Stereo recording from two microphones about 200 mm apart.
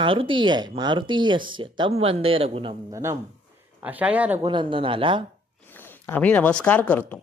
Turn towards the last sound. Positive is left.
turn(degrees=5)  # may be behind; listen again after turning